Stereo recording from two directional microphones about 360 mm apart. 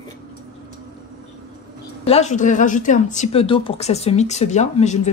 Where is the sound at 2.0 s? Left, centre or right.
Centre.